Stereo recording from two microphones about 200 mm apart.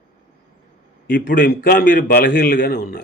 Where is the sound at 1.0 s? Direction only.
50° left (ahead or behind).